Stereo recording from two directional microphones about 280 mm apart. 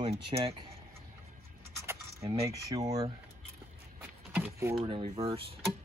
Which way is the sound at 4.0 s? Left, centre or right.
Centre.